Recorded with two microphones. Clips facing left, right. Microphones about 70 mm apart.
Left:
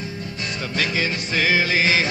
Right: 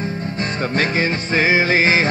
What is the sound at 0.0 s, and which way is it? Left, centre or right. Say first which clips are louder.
Music: right 7 dB; right.